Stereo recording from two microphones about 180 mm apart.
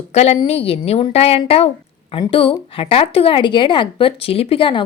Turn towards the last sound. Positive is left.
turn(degrees=30)  # may be behind; listen again after turning